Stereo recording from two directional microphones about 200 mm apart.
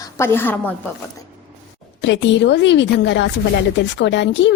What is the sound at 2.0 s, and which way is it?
Speech, 60° left (ahead or behind).